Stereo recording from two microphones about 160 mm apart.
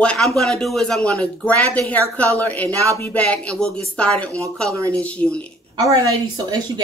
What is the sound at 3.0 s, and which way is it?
Speech, 10° left (ahead or behind).